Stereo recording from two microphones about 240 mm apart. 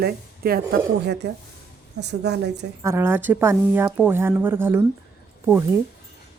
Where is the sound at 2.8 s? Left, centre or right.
Centre.